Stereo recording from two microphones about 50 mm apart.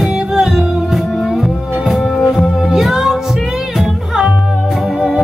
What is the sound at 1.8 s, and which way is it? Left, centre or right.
Music, centre.